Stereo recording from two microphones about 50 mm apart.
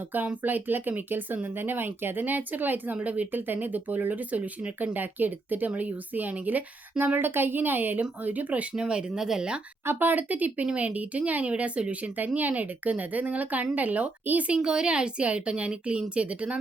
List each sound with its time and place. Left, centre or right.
0.4 s speech: right
8.7 s speech: centre
9.8 s speech: right
14.5 s a woman's voice: centre